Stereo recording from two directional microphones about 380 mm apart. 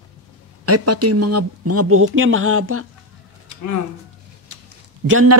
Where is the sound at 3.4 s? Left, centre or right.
Left.